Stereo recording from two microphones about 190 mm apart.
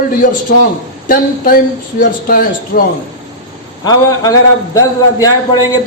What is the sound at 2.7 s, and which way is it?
Speech, 50° left (ahead or behind).